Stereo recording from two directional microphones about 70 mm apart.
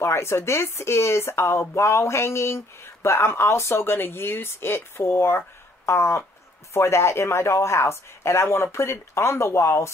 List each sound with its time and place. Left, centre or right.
0.0 s speech: left